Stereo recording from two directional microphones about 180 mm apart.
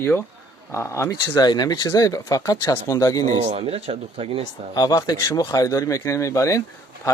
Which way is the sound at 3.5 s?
35° right (ahead or behind).